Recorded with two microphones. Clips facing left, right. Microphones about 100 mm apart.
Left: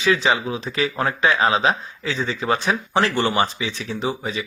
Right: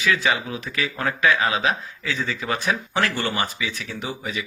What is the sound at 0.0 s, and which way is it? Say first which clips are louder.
Speech: left 3 dB; 25° left (ahead or behind).